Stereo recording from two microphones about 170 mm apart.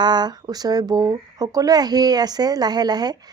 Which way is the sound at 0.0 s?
25° right (ahead or behind).